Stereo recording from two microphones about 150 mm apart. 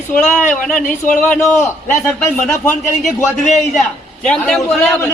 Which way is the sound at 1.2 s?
10° left (ahead or behind).